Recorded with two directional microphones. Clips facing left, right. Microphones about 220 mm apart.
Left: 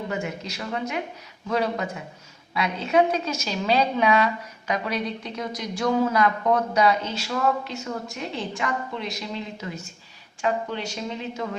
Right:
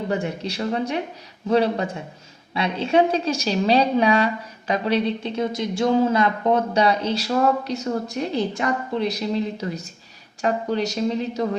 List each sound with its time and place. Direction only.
0.1 s a woman's voice: 35° right (ahead or behind)